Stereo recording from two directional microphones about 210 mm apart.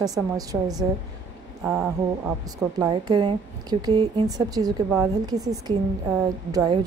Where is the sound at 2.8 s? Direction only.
20° right (ahead or behind).